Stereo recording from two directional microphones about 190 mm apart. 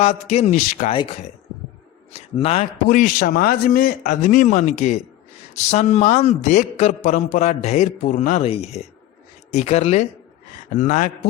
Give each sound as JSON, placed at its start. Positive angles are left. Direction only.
{"t": 0.0, "sound": "a man's voice", "side_deg": 35}